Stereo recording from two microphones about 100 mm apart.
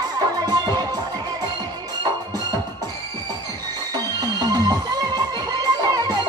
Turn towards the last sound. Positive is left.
turn(degrees=-40)  # may be behind; listen again after turning